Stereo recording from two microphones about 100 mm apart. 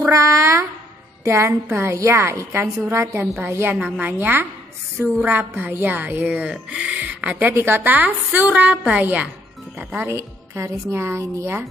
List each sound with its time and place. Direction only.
0.0 s cat: 30° right (ahead or behind)
1.2 s a woman's voice: 25° right (ahead or behind)
3.7 s speech: 10° right (ahead or behind)
10.0 s a woman's voice: 30° right (ahead or behind)